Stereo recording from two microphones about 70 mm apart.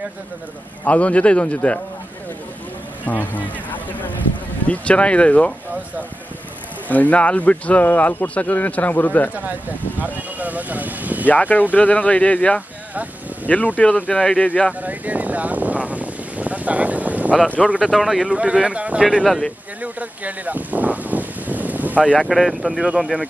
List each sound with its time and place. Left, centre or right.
0.8 s speech: centre
3.1 s speech: left
6.9 s speech: left
9.3 s speech: right
11.2 s speech: left
14.7 s boat: right
17.6 s speech: centre
18.3 s speech: centre
19.2 s speech: centre
19.8 s a sound: right
22.2 s speech: centre